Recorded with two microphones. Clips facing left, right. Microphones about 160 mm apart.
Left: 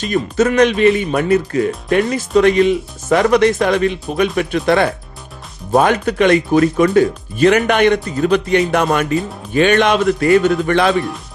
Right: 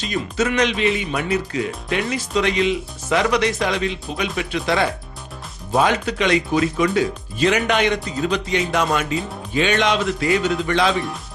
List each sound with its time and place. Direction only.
0.0 s speech: 50° left (ahead or behind)